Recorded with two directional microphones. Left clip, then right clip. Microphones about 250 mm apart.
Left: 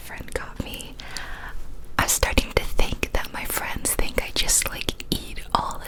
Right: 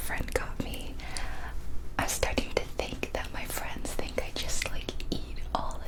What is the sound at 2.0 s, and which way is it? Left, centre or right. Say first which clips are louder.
Whispering: left 8 dB; left.